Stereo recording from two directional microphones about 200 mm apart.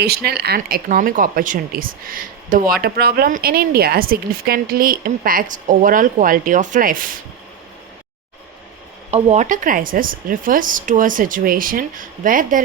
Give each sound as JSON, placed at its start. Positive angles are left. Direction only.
{"t": 0.0, "sound": "a woman's voice", "side_deg": -50}
{"t": 9.0, "sound": "a woman's voice", "side_deg": -35}